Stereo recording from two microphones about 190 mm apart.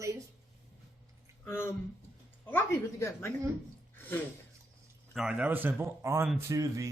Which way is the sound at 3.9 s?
10° left (ahead or behind).